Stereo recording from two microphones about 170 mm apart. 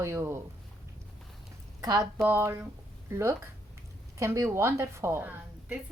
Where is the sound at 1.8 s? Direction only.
25° right (ahead or behind).